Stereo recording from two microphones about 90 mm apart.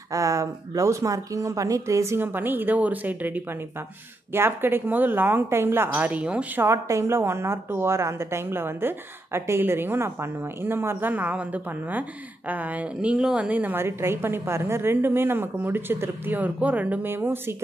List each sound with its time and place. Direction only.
0.1 s speech: 40° right (ahead or behind)
2.2 s a woman's voice: 20° right (ahead or behind)
6.6 s a woman's voice: 30° right (ahead or behind); by 13.5 s 10° right (ahead or behind)
13.5 s a woman's voice: 20° right (ahead or behind)